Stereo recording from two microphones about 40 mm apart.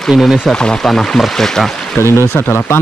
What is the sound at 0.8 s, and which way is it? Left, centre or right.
Speech, centre.